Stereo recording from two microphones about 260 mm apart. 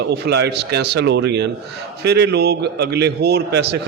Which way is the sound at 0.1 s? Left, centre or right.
Right.